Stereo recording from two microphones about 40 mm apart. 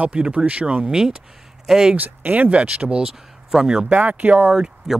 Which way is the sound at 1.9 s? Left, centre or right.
Right.